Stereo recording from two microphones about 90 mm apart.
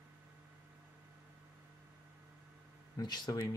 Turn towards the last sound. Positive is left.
turn(degrees=50)  # may be behind; listen again after turning